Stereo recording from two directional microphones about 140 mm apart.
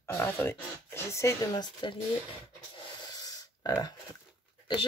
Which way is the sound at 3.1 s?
25° left (ahead or behind).